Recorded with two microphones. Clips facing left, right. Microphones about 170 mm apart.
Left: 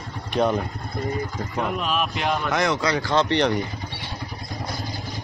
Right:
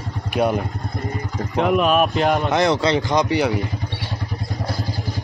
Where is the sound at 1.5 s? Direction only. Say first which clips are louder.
Right 9 dB; 70° right (ahead or behind).